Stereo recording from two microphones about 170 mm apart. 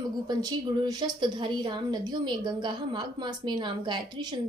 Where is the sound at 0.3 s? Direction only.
20° right (ahead or behind).